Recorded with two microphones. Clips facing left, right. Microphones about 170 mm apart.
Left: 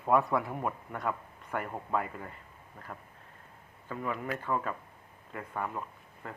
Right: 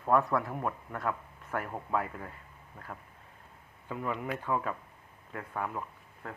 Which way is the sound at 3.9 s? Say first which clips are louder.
Even; 5° right (ahead or behind).